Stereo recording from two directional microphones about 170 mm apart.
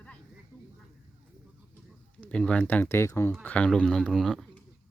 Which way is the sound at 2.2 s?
5° left (ahead or behind).